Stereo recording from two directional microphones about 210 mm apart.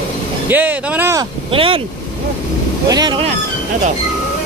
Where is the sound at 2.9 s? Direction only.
20° right (ahead or behind).